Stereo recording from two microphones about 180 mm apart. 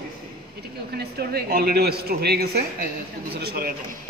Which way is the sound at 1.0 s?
60° right (ahead or behind).